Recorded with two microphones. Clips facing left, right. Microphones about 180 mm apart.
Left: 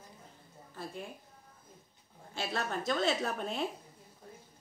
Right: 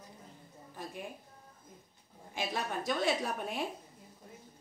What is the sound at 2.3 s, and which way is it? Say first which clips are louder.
A woman's voice: even; 10° right (ahead or behind).